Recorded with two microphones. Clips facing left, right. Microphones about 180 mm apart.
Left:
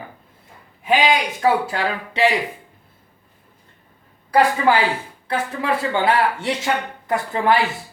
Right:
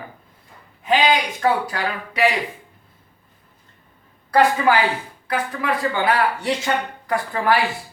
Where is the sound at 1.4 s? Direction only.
25° left (ahead or behind).